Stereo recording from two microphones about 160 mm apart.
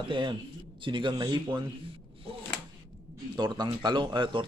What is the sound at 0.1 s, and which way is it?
A man's voice, 30° right (ahead or behind).